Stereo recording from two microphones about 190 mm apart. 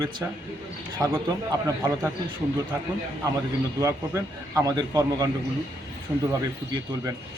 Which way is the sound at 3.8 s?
15° right (ahead or behind).